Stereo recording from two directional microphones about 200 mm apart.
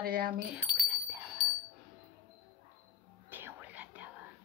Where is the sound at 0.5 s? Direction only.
5° right (ahead or behind).